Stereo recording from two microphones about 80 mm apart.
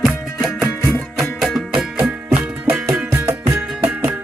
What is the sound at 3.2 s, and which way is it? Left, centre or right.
Music, right.